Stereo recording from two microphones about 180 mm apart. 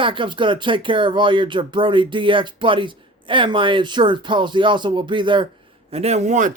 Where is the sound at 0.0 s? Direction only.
25° right (ahead or behind).